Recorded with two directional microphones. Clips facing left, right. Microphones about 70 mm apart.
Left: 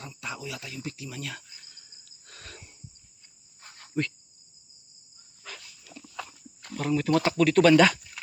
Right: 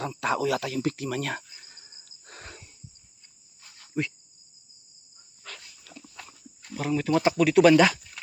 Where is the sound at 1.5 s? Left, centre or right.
Right.